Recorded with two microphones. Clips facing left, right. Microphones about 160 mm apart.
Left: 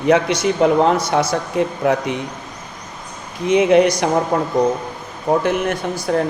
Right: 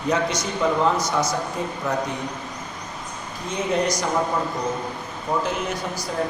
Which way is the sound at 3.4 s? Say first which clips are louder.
Left 11 dB; 75° left (ahead or behind).